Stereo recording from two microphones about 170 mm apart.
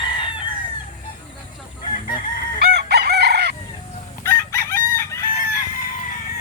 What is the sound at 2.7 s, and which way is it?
Chicken, 70° right (ahead or behind).